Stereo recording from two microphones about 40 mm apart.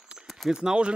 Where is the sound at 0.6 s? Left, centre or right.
Right.